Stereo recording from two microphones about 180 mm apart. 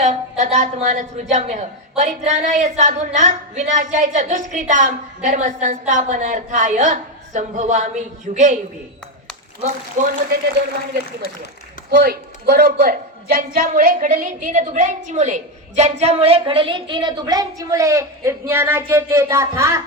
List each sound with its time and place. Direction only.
0.0 s a woman's voice: 40° right (ahead or behind)
10.0 s speech: 45° right (ahead or behind)
11.9 s a woman's voice: 60° right (ahead or behind); by 19.8 s 15° right (ahead or behind)